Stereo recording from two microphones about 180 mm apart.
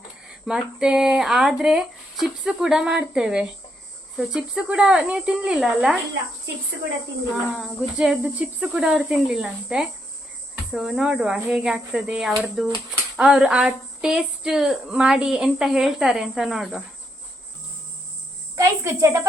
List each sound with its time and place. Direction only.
0.4 s a woman's voice: 5° right (ahead or behind)
7.5 s a woman's voice: centre (ahead or behind)
18.5 s a woman's voice: 15° right (ahead or behind)